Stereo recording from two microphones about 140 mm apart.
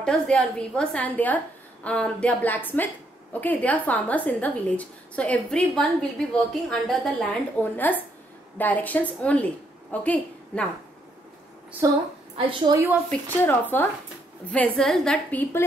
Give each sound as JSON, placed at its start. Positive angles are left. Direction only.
{"t": 0.0, "sound": "a woman's voice", "side_deg": 5}
{"t": 11.8, "sound": "a woman's voice", "side_deg": -20}
{"t": 13.4, "sound": "a woman's voice", "side_deg": 15}